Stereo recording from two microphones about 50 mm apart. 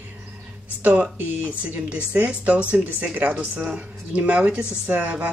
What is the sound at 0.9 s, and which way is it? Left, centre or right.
Speech, right.